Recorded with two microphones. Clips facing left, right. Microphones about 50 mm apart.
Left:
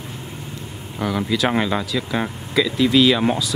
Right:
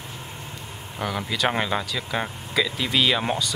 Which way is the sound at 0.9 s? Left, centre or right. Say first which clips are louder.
Left 6 dB; centre.